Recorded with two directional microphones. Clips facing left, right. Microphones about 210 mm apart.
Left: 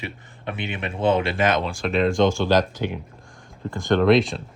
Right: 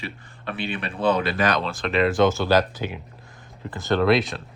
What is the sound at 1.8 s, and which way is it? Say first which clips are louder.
Speech: even; centre (ahead or behind).